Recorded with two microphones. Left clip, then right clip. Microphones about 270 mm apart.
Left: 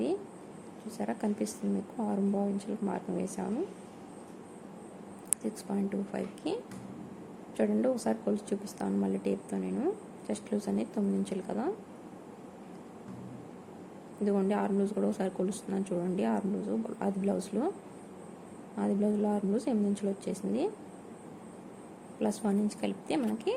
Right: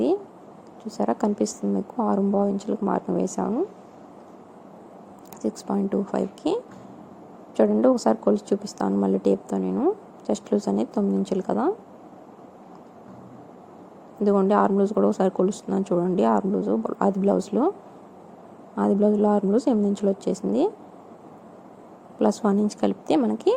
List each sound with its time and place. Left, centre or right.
0.9 s speech: centre
5.4 s speech: centre
14.3 s speech: right
18.8 s speech: right
22.2 s speech: centre